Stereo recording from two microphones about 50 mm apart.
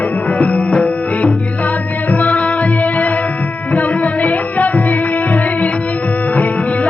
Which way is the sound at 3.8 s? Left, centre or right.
Left.